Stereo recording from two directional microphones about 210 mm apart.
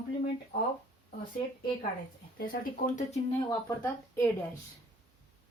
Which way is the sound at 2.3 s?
40° left (ahead or behind).